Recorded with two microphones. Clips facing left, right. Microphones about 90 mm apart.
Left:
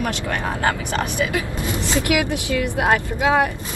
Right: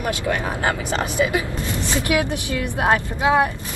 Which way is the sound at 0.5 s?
20° right (ahead or behind).